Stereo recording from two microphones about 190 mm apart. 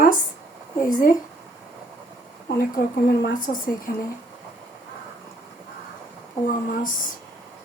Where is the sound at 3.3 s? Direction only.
45° left (ahead or behind).